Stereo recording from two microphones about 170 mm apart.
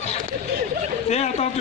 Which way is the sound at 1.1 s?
40° left (ahead or behind).